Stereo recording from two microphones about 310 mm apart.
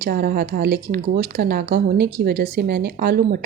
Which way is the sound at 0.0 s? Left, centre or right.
Right.